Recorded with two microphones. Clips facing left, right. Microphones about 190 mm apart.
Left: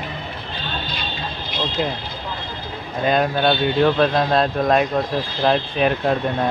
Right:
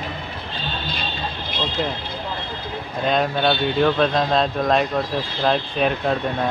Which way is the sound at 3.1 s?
Centre (ahead or behind).